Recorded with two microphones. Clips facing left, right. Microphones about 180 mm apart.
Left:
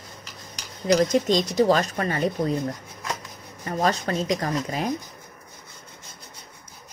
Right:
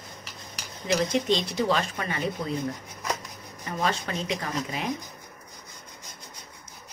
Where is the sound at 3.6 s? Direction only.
40° left (ahead or behind).